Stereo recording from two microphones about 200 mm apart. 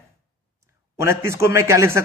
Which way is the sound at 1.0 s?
15° right (ahead or behind).